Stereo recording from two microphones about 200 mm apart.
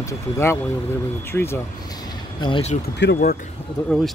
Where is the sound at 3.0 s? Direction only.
60° left (ahead or behind).